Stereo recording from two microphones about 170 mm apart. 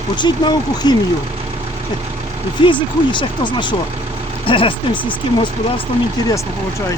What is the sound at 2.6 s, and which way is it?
Speech, 30° left (ahead or behind).